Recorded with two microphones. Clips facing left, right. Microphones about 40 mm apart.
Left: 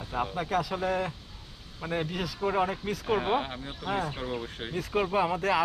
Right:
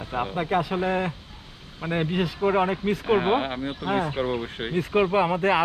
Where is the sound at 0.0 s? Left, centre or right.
Right.